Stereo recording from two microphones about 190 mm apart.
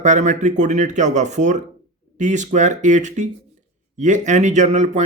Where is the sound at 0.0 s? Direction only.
40° right (ahead or behind).